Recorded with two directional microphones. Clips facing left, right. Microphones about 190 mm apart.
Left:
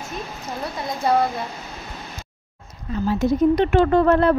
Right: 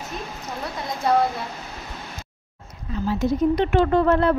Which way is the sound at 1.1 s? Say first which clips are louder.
Left 1 dB; centre (ahead or behind).